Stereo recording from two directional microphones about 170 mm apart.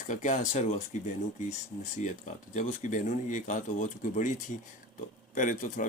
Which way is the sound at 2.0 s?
45° left (ahead or behind).